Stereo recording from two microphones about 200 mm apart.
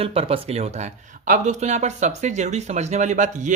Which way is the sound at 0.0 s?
30° right (ahead or behind).